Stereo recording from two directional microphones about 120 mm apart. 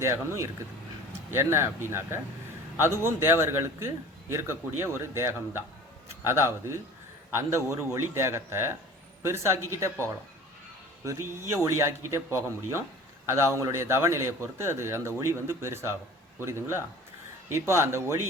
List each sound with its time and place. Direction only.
0.0 s a man's voice: 20° right (ahead or behind)